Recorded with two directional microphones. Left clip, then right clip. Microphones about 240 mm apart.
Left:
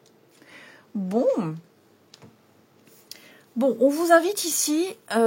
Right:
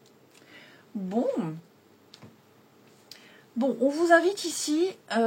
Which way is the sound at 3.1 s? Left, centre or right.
Left.